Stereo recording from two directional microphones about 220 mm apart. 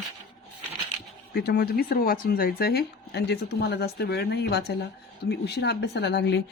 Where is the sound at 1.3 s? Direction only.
45° left (ahead or behind).